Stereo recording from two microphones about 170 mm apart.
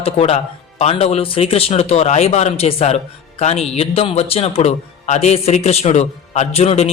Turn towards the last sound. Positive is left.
turn(degrees=35)  # may be behind; listen again after turning